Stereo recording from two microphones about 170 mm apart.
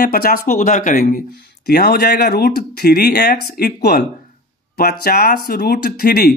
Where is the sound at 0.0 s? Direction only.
60° left (ahead or behind).